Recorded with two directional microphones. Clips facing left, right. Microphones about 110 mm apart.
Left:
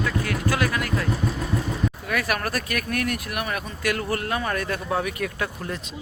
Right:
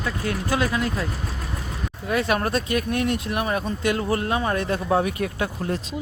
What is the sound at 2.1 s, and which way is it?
Speech, 25° right (ahead or behind).